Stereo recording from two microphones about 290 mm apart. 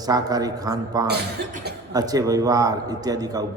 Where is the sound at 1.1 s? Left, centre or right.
Right.